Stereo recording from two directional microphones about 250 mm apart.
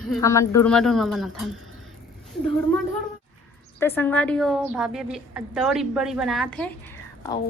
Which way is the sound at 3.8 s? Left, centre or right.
Centre.